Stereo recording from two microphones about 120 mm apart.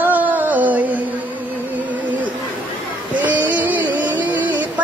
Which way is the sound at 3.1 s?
10° right (ahead or behind).